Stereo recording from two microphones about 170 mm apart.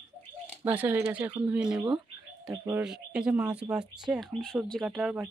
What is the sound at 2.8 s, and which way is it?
Speech, 5° right (ahead or behind).